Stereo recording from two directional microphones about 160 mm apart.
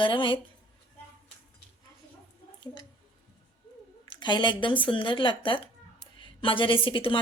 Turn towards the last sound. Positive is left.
turn(degrees=30)  # may be behind; listen again after turning